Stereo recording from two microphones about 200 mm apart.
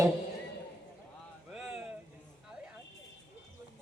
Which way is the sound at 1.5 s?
5° right (ahead or behind).